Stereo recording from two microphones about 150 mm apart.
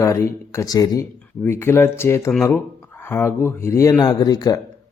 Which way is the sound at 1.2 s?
15° left (ahead or behind).